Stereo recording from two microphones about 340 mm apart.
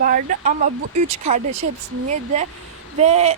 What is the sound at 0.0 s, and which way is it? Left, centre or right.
Speech, right.